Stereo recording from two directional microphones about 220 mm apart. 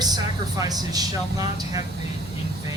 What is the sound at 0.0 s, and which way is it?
Speech, 15° right (ahead or behind).